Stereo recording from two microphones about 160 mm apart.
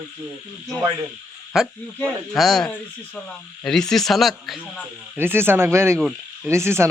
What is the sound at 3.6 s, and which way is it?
Speech, 5° left (ahead or behind).